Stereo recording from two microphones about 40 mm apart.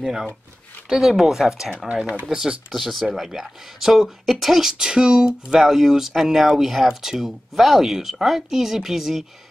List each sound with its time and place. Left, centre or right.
0.0 s speech: centre
2.7 s speech: centre
4.6 s speech: centre